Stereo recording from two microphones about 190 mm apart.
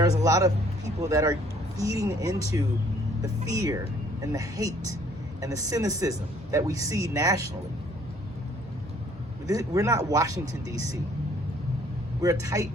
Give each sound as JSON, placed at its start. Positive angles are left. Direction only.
{"t": 0.0, "sound": "a man's voice", "side_deg": -15}
{"t": 9.5, "sound": "a man's voice", "side_deg": -15}
{"t": 12.2, "sound": "a man's voice", "side_deg": -15}